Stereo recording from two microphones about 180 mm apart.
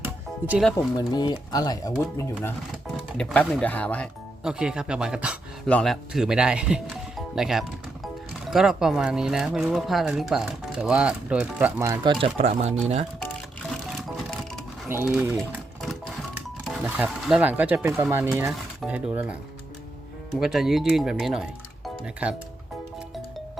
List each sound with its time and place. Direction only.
0.0 s music: 10° right (ahead or behind)
0.9 s speech: 25° left (ahead or behind)
2.8 s speech: centre (ahead or behind)
12.2 s speech: 35° right (ahead or behind)
13.2 s music: 5° left (ahead or behind)
14.8 s speech: 10° right (ahead or behind)
15.4 s sewing machine: centre (ahead or behind)
16.8 s speech: 5° right (ahead or behind)